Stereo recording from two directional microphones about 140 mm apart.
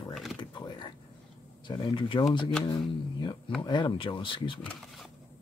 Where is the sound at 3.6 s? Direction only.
35° left (ahead or behind).